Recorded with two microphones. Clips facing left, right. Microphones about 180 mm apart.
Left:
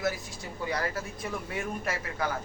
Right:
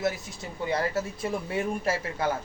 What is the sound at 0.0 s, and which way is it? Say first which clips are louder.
Speech: right 2 dB; 25° right (ahead or behind).